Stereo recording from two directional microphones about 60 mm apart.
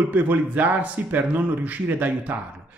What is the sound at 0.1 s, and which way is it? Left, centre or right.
A man's voice, right.